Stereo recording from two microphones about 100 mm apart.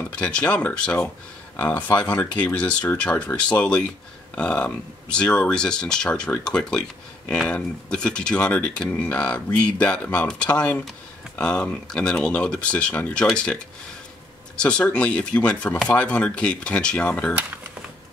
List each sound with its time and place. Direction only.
0.1 s speech: 10° left (ahead or behind)
14.6 s speech: 10° left (ahead or behind)